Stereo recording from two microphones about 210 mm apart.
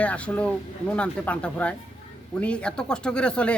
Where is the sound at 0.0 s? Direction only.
5° left (ahead or behind).